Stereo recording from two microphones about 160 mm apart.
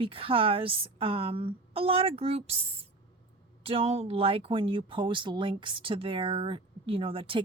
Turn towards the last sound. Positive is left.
turn(degrees=-35)  # may be behind; listen again after turning